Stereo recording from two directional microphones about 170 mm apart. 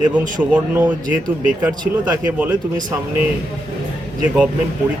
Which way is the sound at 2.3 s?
10° right (ahead or behind).